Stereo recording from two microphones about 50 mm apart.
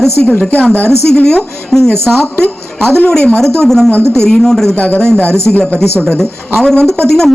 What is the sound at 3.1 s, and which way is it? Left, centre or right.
Speech, centre.